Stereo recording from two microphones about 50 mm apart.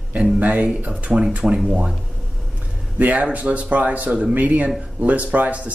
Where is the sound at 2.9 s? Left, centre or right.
Right.